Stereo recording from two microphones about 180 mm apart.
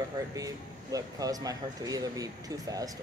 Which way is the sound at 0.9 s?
20° right (ahead or behind).